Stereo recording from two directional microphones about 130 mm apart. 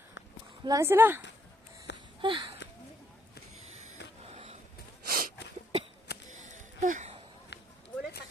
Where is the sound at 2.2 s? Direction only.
40° right (ahead or behind).